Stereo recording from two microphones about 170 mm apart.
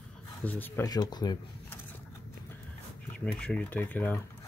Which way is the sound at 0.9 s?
25° left (ahead or behind).